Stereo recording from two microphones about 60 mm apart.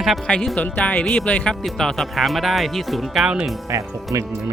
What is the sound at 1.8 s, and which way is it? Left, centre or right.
Speech, centre.